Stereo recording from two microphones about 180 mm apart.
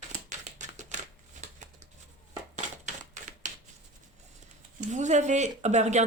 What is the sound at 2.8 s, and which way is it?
Typewriter, 40° right (ahead or behind).